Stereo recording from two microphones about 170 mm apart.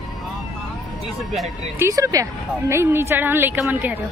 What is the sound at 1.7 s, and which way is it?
A woman's voice, 15° right (ahead or behind).